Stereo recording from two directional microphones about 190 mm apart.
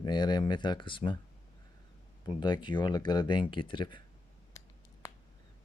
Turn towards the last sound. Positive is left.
turn(degrees=25)  # may be behind; listen again after turning